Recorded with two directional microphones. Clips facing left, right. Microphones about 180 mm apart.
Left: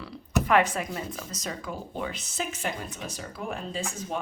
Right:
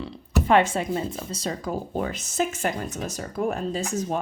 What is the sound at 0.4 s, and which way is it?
Speech, 25° right (ahead or behind).